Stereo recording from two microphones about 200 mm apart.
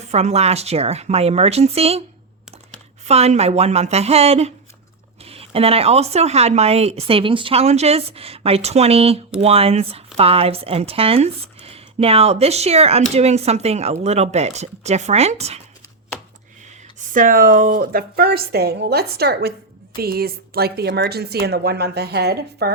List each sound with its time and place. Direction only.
0.1 s speech: 35° right (ahead or behind)
3.1 s speech: 30° right (ahead or behind)
16.6 s speech: 40° right (ahead or behind)